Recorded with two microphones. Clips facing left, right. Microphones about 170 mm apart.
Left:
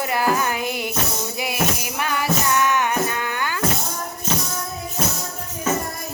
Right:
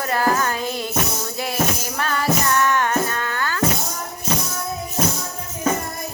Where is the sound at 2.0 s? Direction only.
15° left (ahead or behind).